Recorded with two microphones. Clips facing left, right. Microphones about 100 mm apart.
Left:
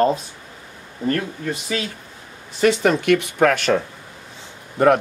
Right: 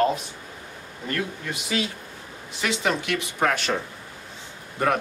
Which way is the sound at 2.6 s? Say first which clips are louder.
Left 9 dB; 45° left (ahead or behind).